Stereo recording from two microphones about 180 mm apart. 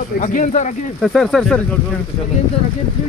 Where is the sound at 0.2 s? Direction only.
45° left (ahead or behind).